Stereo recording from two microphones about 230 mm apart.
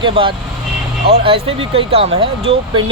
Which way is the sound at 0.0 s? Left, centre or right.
Right.